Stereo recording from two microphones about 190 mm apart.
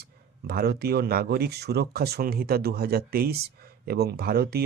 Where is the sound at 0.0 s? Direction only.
55° right (ahead or behind).